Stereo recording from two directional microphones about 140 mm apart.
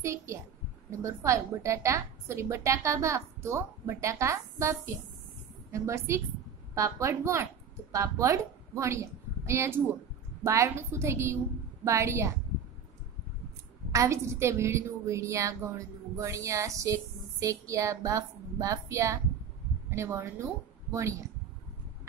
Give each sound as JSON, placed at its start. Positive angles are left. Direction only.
{"t": 0.0, "sound": "a woman's voice", "side_deg": -20}
{"t": 13.9, "sound": "a woman's voice", "side_deg": -20}